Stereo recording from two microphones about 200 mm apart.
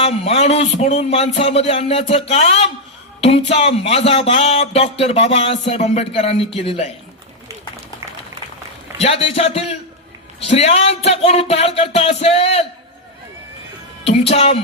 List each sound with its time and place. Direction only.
0.0 s a woman's voice: 30° left (ahead or behind)
9.0 s speech: 30° left (ahead or behind)
14.0 s a woman's voice: 30° left (ahead or behind)